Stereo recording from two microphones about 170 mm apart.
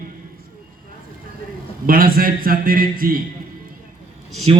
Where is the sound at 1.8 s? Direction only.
55° right (ahead or behind).